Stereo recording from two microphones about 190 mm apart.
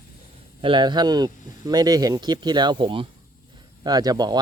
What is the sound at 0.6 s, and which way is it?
Speech, 25° right (ahead or behind).